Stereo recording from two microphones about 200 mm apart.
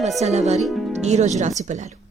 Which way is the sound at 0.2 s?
35° right (ahead or behind).